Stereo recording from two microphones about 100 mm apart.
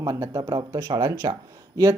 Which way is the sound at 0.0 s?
35° right (ahead or behind).